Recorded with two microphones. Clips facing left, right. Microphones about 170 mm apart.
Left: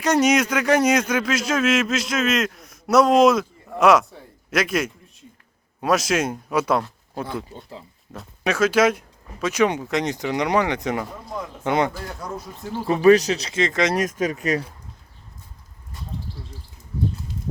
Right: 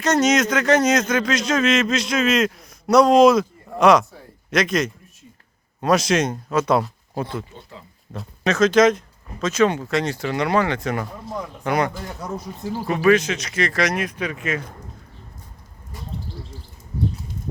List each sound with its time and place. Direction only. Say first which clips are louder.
0.0 s speech: even; 10° left (ahead or behind)
6.7 s a sound: right 3 dB; 5° right (ahead or behind)
8.4 s speech: right 3 dB; 10° left (ahead or behind)
12.4 s speech: right 2 dB; 15° right (ahead or behind)
13.0 s speech: left 3 dB; 35° left (ahead or behind)
13.9 s speech: left 3 dB; 40° left (ahead or behind)